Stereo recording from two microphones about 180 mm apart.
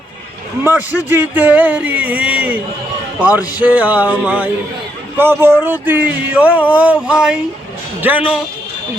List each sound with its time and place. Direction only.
0.6 s speech: 10° right (ahead or behind)